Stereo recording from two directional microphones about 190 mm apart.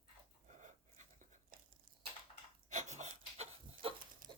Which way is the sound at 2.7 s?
40° right (ahead or behind).